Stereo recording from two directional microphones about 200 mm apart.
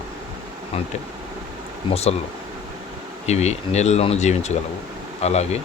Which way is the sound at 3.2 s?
35° left (ahead or behind).